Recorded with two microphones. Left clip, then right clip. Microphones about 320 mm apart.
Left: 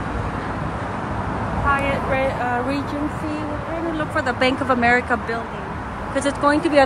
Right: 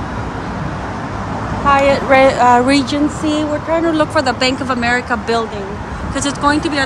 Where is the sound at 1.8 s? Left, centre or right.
Right.